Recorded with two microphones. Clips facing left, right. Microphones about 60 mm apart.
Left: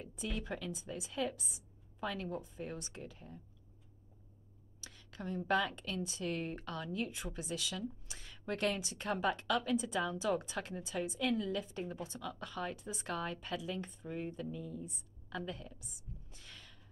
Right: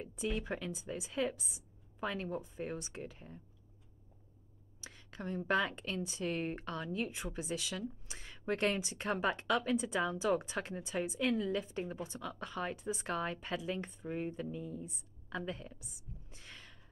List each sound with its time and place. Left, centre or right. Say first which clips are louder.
0.0 s speech: right 4 dB; right
4.8 s a sound: right 1 dB; right
5.5 s speech: right 1 dB; right